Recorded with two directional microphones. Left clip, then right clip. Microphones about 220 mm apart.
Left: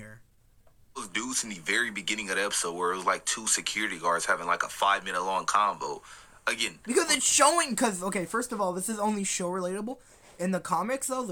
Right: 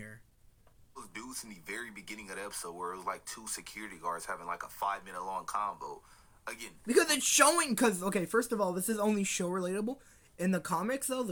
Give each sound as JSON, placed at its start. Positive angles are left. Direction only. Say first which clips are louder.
{"t": 0.9, "sound": "speech", "louder": "left 12 dB", "side_deg": 40}
{"t": 6.8, "sound": "speech", "louder": "left 1 dB", "side_deg": 0}